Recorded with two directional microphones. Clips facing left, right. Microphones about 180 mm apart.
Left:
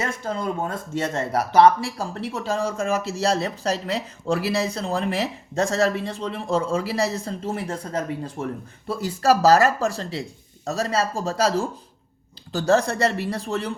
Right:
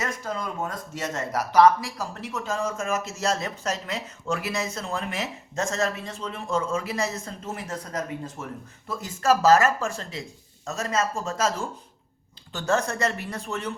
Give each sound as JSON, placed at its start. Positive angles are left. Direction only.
{"t": 0.0, "sound": "speech", "side_deg": 30}